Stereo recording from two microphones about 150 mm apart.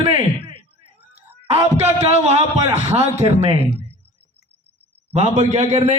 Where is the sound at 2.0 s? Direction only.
45° right (ahead or behind).